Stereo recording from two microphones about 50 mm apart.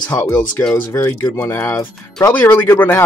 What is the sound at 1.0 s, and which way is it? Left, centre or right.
Speech, left.